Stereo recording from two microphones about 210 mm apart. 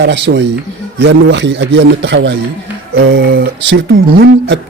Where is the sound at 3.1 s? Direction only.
45° right (ahead or behind).